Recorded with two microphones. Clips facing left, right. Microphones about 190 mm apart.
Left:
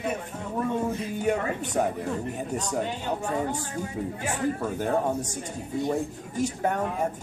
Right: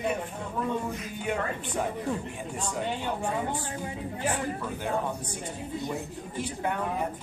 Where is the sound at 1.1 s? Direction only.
45° left (ahead or behind).